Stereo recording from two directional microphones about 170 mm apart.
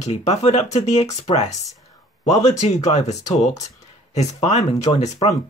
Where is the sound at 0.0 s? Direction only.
40° left (ahead or behind).